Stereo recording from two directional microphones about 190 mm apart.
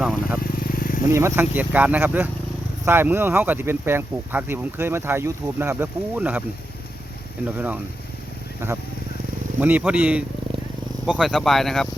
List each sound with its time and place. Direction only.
0.0 s speech: 5° right (ahead or behind)
0.6 s vehicle: 50° left (ahead or behind)
1.1 s speech: 10° right (ahead or behind)
7.4 s speech: 10° right (ahead or behind)
9.6 s speech: 10° right (ahead or behind)